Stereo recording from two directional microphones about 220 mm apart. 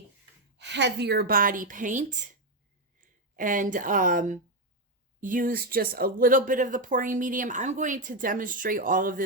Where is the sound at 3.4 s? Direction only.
35° right (ahead or behind).